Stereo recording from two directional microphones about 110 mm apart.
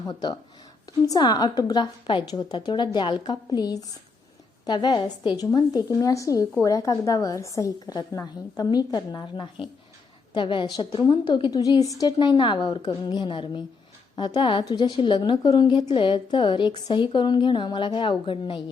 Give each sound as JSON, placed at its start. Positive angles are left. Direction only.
{"t": 0.1, "sound": "a woman's voice", "side_deg": 40}